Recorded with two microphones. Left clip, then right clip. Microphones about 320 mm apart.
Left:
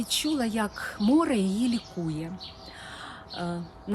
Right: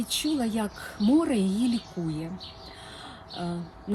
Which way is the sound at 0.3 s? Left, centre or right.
Centre.